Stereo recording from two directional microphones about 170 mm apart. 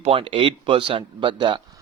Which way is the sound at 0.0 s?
35° right (ahead or behind).